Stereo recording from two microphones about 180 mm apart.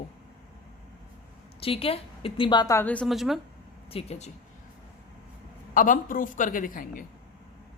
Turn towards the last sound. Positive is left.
turn(degrees=50)  # may be behind; listen again after turning